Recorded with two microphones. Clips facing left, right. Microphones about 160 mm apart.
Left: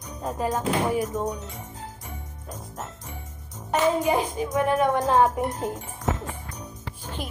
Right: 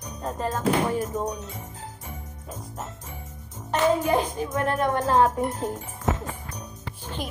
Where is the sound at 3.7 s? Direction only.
5° left (ahead or behind).